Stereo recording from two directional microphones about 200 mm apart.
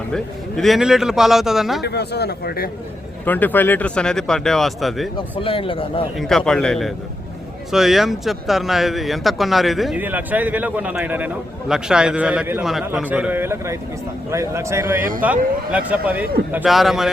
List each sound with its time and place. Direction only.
0.1 s speech: centre (ahead or behind)
1.8 s speech: 55° left (ahead or behind)
3.2 s speech: 10° left (ahead or behind)
5.1 s speech: 25° left (ahead or behind)
6.1 s speech: centre (ahead or behind)